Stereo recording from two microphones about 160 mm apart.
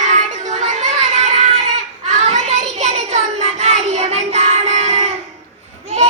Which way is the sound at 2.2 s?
45° right (ahead or behind).